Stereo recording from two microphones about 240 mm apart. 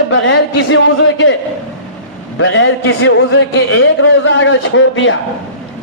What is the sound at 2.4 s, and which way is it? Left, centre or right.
A man's voice, left.